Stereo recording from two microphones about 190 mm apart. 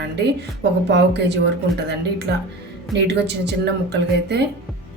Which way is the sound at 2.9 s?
65° right (ahead or behind).